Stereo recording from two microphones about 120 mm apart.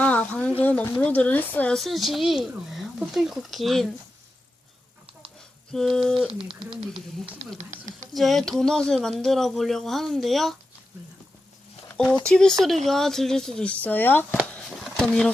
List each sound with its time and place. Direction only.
0.0 s a sound: 10° left (ahead or behind)
0.6 s speech: 10° left (ahead or behind)
1.7 s speech: centre (ahead or behind)
5.7 s speech: 5° left (ahead or behind)
7.6 s speech: 90° right
8.1 s speech: centre (ahead or behind)
11.9 s speech: 10° left (ahead or behind)
14.5 s a sound: 5° left (ahead or behind)